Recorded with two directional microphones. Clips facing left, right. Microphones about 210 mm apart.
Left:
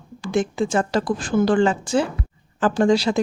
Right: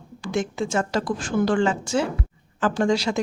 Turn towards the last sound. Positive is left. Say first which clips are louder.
# left 4 dB
turn(degrees=35)  # may be behind; listen again after turning